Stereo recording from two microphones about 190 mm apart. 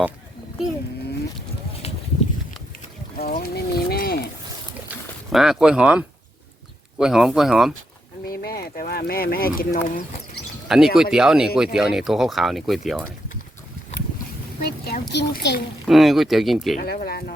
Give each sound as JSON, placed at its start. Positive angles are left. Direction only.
{"t": 1.8, "sound": "a sound", "side_deg": 35}
{"t": 3.2, "sound": "boat", "side_deg": 50}
{"t": 4.9, "sound": "speech", "side_deg": 0}
{"t": 8.3, "sound": "speech", "side_deg": 50}
{"t": 10.7, "sound": "speech", "side_deg": 0}
{"t": 14.6, "sound": "a woman's voice", "side_deg": 55}
{"t": 15.9, "sound": "speech", "side_deg": 0}
{"t": 16.7, "sound": "speech", "side_deg": 55}